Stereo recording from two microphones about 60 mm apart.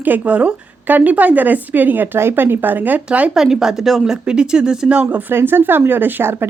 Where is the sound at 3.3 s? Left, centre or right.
Centre.